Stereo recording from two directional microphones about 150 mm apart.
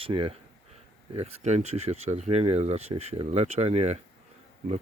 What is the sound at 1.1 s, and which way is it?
Speech, 50° right (ahead or behind).